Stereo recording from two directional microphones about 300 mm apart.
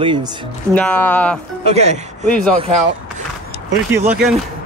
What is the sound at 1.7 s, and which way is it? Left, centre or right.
Speech, right.